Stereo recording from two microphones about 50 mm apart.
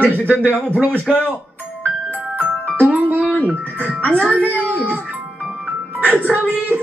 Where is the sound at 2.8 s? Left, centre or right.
Right.